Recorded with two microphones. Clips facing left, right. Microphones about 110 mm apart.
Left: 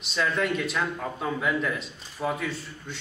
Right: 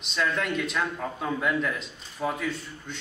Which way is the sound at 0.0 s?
Centre (ahead or behind).